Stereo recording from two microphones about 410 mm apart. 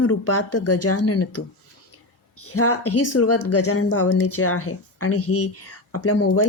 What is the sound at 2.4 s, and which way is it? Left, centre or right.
A woman's voice, left.